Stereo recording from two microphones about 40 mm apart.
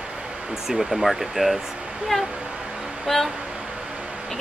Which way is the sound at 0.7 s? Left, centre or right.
Centre.